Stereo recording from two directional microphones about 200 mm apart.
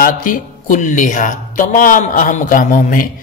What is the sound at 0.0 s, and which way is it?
Speech, 45° left (ahead or behind).